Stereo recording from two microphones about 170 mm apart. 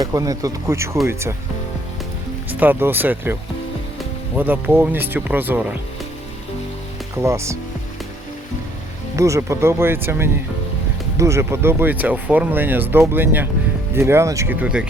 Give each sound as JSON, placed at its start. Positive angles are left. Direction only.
{"t": 0.0, "sound": "speech", "side_deg": -20}
{"t": 2.5, "sound": "speech", "side_deg": -10}
{"t": 4.4, "sound": "speech", "side_deg": -10}
{"t": 7.2, "sound": "speech", "side_deg": -15}
{"t": 9.1, "sound": "speech", "side_deg": -15}